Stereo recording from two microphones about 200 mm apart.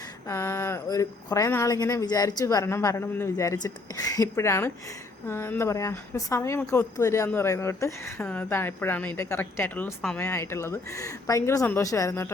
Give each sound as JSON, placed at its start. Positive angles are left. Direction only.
{"t": 0.3, "sound": "a woman's voice", "side_deg": 15}